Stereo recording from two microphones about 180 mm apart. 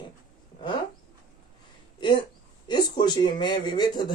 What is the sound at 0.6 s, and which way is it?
Dog, 25° left (ahead or behind).